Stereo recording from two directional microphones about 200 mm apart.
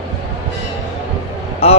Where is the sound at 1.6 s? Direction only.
30° left (ahead or behind).